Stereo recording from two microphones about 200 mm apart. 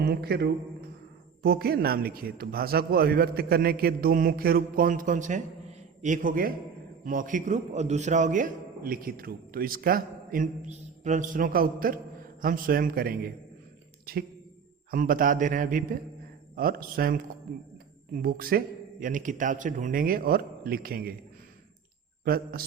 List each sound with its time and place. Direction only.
0.0 s a man's voice: 50° right (ahead or behind)
22.2 s a man's voice: 50° right (ahead or behind)